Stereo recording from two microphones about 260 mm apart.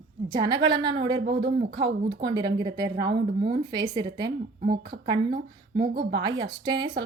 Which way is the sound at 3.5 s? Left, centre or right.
Centre.